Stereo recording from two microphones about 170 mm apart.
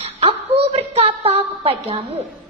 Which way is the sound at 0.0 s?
35° right (ahead or behind).